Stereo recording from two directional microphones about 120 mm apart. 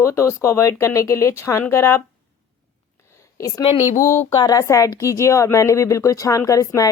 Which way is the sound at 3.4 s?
30° left (ahead or behind).